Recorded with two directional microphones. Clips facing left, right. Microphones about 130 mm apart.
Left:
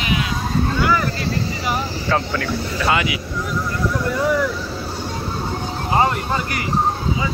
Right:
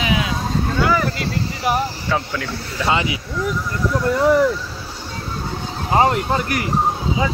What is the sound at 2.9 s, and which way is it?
Speech, 30° right (ahead or behind).